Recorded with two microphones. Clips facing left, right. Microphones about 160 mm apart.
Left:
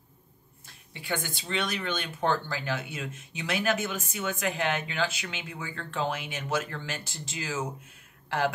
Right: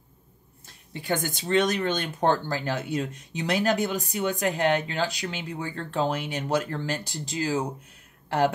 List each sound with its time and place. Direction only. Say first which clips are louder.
0.9 s speech: right 5 dB; 45° right (ahead or behind)